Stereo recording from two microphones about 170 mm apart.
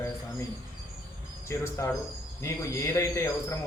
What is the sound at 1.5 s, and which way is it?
A man's voice, 15° left (ahead or behind).